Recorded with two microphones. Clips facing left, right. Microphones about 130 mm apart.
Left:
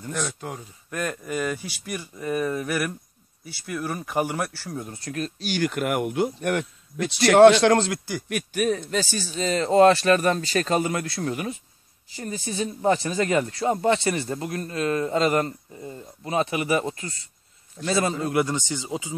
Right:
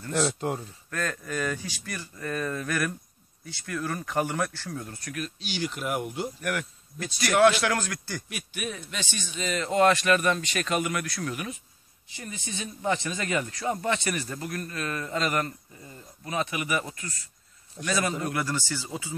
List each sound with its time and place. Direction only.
0.1 s speech: 30° right (ahead or behind)
0.8 s speech: 10° left (ahead or behind)
5.0 s speech: 35° left (ahead or behind)
5.5 s speech: 55° left (ahead or behind)
6.6 s speech: 75° left (ahead or behind)
7.3 s speech: 30° left (ahead or behind)
8.3 s speech: 45° left (ahead or behind); by 19.1 s 20° left (ahead or behind)